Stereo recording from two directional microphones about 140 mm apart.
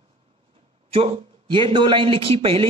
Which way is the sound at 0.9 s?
40° right (ahead or behind).